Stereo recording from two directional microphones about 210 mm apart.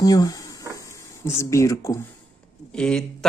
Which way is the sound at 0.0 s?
15° left (ahead or behind).